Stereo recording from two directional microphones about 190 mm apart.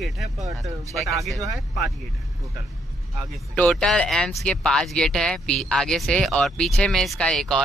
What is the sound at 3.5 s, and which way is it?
Speech, 5° left (ahead or behind).